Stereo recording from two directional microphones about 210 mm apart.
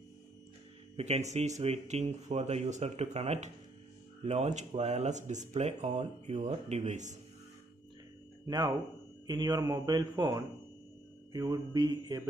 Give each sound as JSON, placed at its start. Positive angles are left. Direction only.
{"t": 0.9, "sound": "speech", "side_deg": -30}
{"t": 8.5, "sound": "a man's voice", "side_deg": -20}